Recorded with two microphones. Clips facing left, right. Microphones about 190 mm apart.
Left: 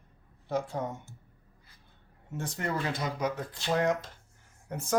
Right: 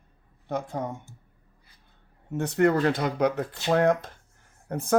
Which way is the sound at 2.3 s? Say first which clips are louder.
Right 11 dB; 65° right (ahead or behind).